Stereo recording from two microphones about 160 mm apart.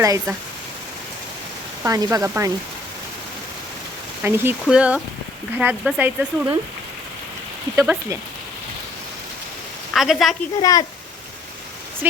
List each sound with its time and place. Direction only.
0.0 s speech: 20° right (ahead or behind)
1.8 s speech: 20° right (ahead or behind)
4.2 s speech: 15° right (ahead or behind)
7.8 s speech: 20° right (ahead or behind)
9.9 s a woman's voice: centre (ahead or behind)
10.6 s speech: 20° left (ahead or behind)